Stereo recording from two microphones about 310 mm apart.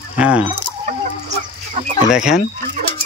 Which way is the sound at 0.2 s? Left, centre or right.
Centre.